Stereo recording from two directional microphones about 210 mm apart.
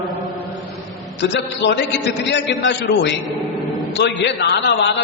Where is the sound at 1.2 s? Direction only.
55° left (ahead or behind).